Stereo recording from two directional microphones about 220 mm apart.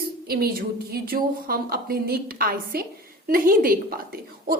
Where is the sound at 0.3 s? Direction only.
45° right (ahead or behind).